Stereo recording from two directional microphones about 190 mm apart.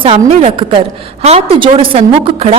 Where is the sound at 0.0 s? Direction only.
30° right (ahead or behind).